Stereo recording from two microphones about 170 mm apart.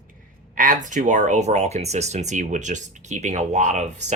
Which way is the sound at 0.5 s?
50° right (ahead or behind).